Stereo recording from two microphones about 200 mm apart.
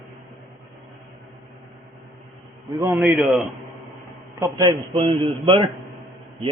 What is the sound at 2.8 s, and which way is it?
Speech, 10° right (ahead or behind).